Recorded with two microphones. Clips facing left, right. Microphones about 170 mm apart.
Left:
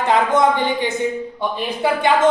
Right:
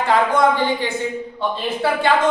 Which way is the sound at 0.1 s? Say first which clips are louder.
Left 1 dB; 20° left (ahead or behind).